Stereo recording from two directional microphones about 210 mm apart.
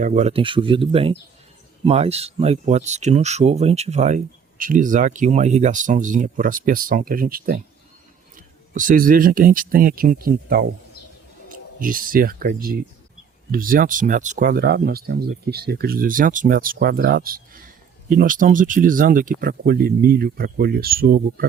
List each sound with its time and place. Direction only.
0.0 s speech: 35° right (ahead or behind)